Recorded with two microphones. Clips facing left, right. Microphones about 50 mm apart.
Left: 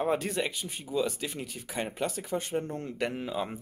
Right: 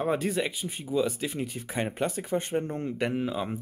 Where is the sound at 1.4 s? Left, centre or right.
Right.